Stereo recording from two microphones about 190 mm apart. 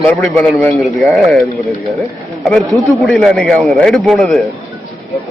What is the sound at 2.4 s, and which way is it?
A man's voice, centre (ahead or behind).